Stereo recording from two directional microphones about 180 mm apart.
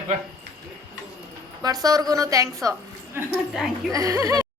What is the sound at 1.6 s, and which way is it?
Speech, 20° right (ahead or behind).